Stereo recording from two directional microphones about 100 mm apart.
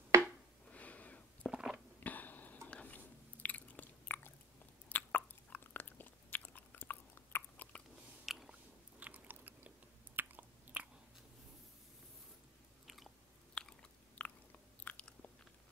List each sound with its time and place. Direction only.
0.7 s a sound: 15° left (ahead or behind)
1.5 s a sound: 5° right (ahead or behind)
2.0 s a sound: 15° left (ahead or behind)
3.4 s chewing: 15° left (ahead or behind)
4.8 s biting: 20° left (ahead or behind)
8.3 s biting: 5° right (ahead or behind)
9.0 s biting: 15° right (ahead or behind)
10.1 s chewing: 15° right (ahead or behind)
12.8 s chewing: centre (ahead or behind)
13.6 s biting: 10° left (ahead or behind)